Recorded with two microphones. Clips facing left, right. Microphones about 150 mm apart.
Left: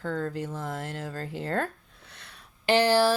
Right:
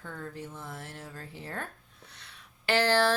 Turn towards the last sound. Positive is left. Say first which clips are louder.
# left 4 dB
turn(degrees=10)  # may be behind; listen again after turning